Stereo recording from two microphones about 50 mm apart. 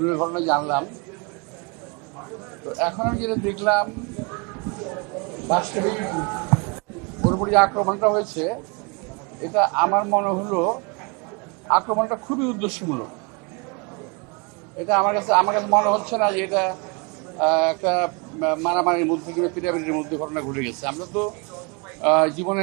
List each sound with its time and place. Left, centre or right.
0.0 s a man's voice: centre
2.1 s a man's voice: centre
14.8 s a man's voice: centre